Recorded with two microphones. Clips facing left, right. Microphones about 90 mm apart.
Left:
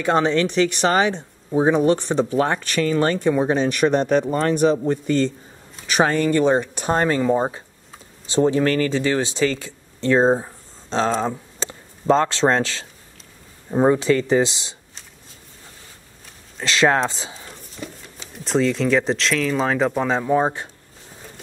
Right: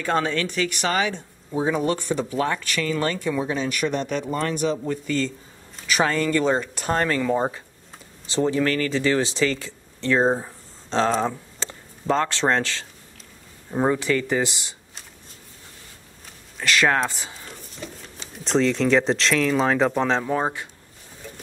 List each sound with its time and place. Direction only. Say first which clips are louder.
0.0 s speech: left 5 dB; 20° left (ahead or behind)
10.4 s a sound: left 1 dB; 20° left (ahead or behind)
11.2 s speech: left 2 dB; 20° left (ahead or behind)
16.6 s speech: left 3 dB; 25° left (ahead or behind)
17.4 s speech: left 2 dB; centre (ahead or behind)